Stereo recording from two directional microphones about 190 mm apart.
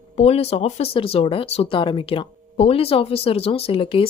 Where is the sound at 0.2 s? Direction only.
30° left (ahead or behind).